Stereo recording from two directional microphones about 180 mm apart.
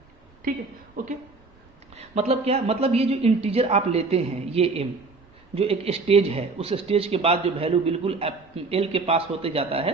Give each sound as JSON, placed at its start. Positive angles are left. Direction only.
{"t": 1.0, "sound": "speech", "side_deg": -50}
{"t": 2.0, "sound": "speech", "side_deg": -35}